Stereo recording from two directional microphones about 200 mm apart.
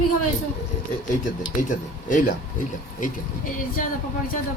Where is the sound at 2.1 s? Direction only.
40° left (ahead or behind).